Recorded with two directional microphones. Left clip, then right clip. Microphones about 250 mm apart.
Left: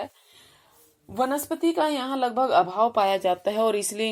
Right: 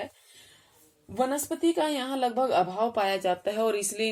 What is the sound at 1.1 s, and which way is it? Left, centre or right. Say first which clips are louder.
Speech: left 3 dB; left.